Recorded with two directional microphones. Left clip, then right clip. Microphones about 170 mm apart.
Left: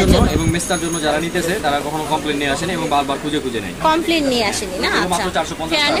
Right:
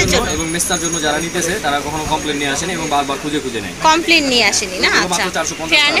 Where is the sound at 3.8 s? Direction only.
5° left (ahead or behind).